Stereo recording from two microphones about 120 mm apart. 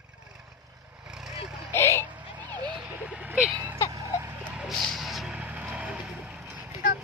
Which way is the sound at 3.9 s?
25° right (ahead or behind).